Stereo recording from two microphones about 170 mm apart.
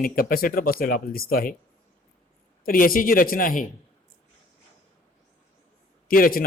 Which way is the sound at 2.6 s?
60° left (ahead or behind).